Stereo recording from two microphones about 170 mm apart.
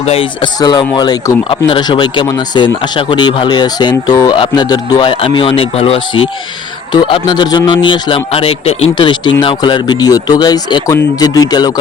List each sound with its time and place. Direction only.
0.1 s speech: 30° left (ahead or behind)